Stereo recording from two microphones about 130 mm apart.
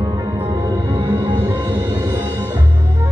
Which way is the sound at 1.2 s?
30° right (ahead or behind).